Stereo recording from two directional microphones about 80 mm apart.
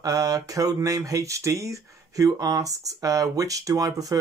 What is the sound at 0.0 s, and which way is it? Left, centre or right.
Speech, right.